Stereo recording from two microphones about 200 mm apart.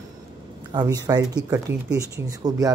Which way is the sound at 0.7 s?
20° right (ahead or behind).